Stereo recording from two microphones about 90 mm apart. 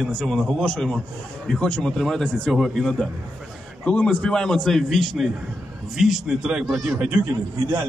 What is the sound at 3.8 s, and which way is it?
A man's voice, 15° left (ahead or behind).